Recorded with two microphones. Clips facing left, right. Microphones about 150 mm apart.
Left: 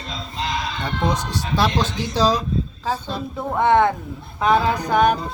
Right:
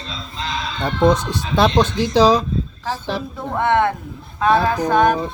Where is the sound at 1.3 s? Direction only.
60° right (ahead or behind).